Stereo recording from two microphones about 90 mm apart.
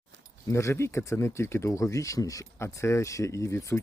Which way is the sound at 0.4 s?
35° left (ahead or behind).